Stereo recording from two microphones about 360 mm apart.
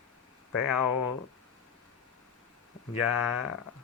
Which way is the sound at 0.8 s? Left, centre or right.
Left.